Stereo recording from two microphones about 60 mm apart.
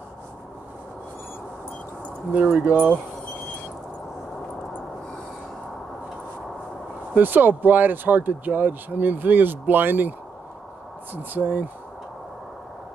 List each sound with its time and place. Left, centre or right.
2.3 s speech: right
7.2 s speech: right
11.3 s speech: right